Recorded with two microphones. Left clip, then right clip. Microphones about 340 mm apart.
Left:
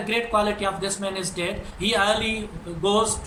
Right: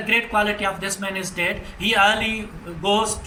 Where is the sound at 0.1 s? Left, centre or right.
Centre.